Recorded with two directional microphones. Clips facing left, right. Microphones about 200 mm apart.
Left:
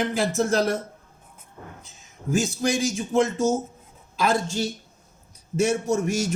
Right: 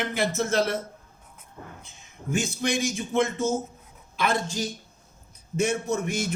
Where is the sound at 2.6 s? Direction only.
40° left (ahead or behind).